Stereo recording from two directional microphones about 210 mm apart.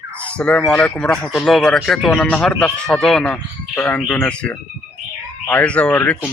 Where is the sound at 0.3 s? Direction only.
5° left (ahead or behind).